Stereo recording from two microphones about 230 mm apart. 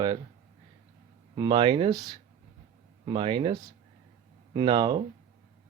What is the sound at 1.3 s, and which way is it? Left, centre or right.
Speech, centre.